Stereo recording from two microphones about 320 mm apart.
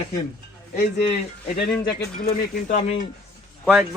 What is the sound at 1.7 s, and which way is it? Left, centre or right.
Speech, centre.